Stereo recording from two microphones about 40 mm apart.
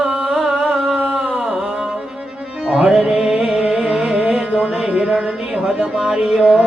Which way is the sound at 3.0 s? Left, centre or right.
Centre.